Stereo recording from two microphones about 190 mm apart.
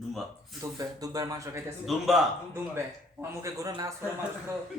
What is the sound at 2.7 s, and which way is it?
A man's voice, 15° right (ahead or behind).